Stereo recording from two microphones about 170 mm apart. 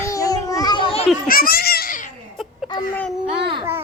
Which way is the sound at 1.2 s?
60° left (ahead or behind).